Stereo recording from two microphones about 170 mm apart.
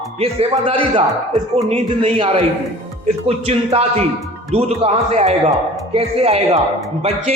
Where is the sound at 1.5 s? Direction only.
40° right (ahead or behind).